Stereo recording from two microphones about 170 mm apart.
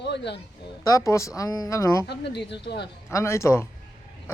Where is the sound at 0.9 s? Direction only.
20° left (ahead or behind).